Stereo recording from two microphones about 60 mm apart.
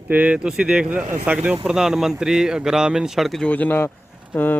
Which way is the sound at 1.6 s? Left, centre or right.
Centre.